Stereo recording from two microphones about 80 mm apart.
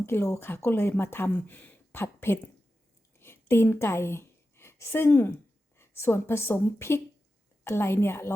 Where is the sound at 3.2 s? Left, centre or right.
Left.